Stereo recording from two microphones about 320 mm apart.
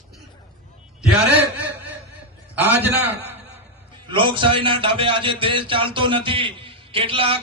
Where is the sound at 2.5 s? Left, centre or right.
Centre.